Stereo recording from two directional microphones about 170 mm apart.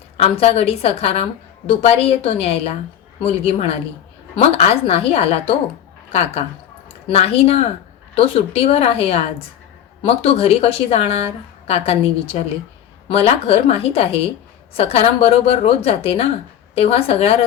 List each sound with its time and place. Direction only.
0.2 s a woman's voice: 35° left (ahead or behind)